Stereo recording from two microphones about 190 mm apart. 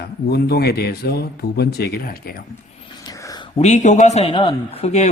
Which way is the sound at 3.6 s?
40° left (ahead or behind).